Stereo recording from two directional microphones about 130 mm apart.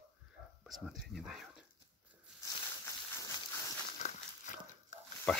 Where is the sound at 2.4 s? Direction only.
25° left (ahead or behind).